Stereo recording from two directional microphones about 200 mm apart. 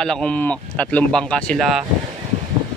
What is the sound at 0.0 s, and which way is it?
Speech, 5° left (ahead or behind).